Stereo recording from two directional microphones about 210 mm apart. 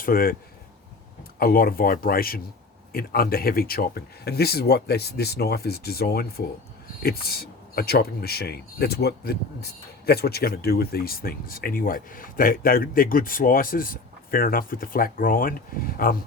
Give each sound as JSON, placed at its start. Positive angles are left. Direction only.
{"t": 0.0, "sound": "speech", "side_deg": 45}
{"t": 1.4, "sound": "speech", "side_deg": 45}